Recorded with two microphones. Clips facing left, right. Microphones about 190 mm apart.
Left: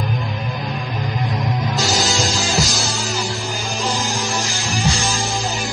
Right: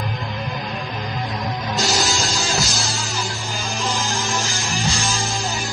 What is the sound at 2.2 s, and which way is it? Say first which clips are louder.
Music: left 3 dB; 15° left (ahead or behind).